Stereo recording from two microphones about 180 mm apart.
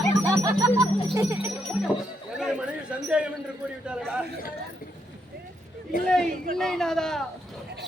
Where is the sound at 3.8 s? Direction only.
5° right (ahead or behind).